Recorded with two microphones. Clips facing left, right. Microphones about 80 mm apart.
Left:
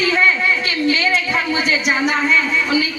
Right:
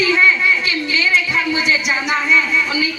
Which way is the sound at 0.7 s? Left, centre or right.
Left.